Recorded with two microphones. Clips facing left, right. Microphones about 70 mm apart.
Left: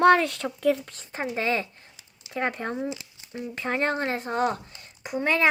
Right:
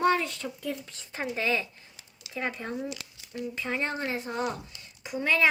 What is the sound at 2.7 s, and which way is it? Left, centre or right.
Speech, left.